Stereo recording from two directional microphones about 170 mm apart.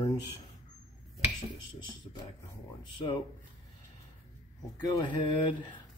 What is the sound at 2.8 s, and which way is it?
Speech, 30° left (ahead or behind).